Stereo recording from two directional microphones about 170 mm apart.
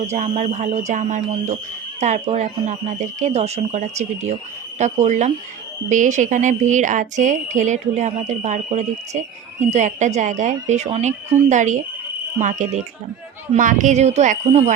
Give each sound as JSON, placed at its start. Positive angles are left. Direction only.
{"t": 0.1, "sound": "a woman's voice", "side_deg": -45}